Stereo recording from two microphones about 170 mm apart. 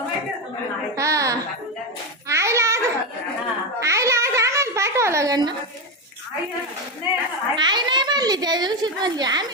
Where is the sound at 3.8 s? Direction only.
20° right (ahead or behind).